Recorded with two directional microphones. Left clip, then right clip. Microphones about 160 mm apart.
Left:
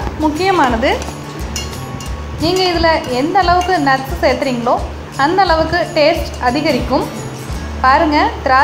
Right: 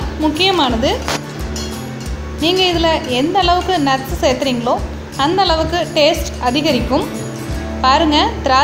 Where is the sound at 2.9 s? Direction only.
25° right (ahead or behind).